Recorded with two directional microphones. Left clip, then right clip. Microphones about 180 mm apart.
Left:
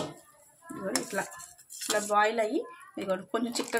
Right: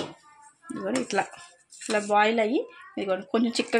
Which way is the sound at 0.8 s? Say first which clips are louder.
Right 6 dB; 45° right (ahead or behind).